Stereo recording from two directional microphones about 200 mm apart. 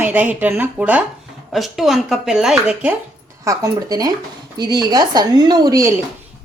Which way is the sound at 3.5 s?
20° right (ahead or behind).